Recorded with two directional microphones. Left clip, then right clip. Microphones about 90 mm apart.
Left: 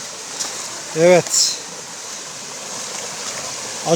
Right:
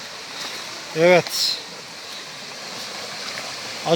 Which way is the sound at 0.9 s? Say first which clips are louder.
Left 3 dB; 25° left (ahead or behind).